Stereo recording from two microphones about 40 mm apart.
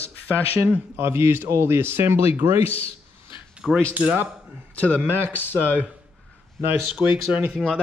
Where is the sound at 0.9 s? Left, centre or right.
Right.